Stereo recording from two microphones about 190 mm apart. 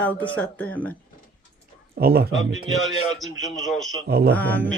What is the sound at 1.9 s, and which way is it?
Speech, 55° right (ahead or behind).